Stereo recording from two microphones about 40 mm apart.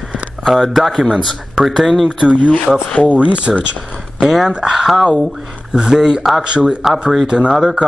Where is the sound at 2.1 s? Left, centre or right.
Right.